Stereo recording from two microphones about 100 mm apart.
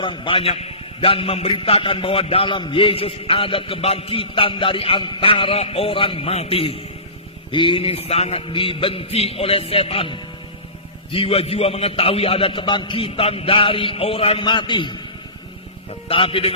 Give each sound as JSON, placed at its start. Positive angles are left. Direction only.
{"t": 0.0, "sound": "a man's voice", "side_deg": 60}
{"t": 7.5, "sound": "a man's voice", "side_deg": 55}
{"t": 16.0, "sound": "a man's voice", "side_deg": 60}